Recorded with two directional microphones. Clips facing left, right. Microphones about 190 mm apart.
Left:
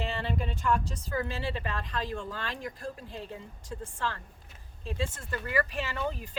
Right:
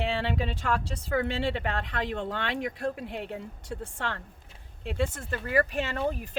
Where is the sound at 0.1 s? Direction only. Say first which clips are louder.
Right 4 dB; 80° right.